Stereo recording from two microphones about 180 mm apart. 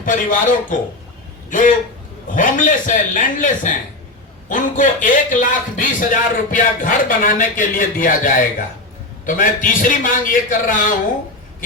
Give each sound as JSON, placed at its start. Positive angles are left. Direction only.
{"t": 0.0, "sound": "a man's voice", "side_deg": 45}